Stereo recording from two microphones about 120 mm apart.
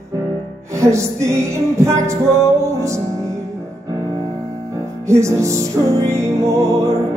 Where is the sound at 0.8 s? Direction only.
25° right (ahead or behind).